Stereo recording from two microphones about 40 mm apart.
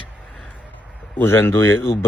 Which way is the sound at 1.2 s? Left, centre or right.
Left.